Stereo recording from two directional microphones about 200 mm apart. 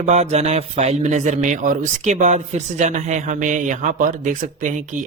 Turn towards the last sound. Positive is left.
turn(degrees=-40)  # may be behind; listen again after turning